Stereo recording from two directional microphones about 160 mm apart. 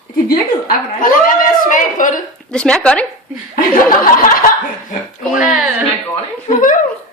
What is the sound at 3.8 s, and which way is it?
Speech, 60° left (ahead or behind).